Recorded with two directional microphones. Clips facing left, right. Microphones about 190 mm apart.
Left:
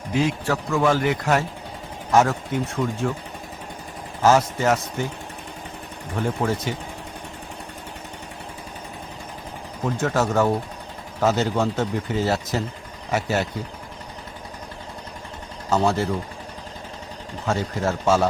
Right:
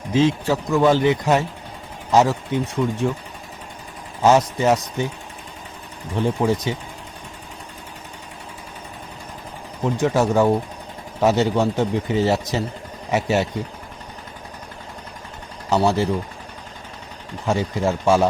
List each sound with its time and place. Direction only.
0.1 s speech: 25° right (ahead or behind)
4.2 s speech: 15° right (ahead or behind)
6.1 s speech: 15° right (ahead or behind)
9.8 s speech: 15° right (ahead or behind)
17.4 s speech: 15° right (ahead or behind)